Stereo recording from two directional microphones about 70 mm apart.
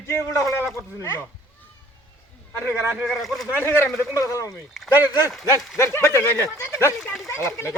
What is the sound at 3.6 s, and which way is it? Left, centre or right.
Speech, left.